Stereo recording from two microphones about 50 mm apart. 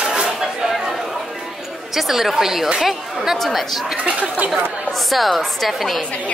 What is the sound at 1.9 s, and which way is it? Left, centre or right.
A woman's voice, centre.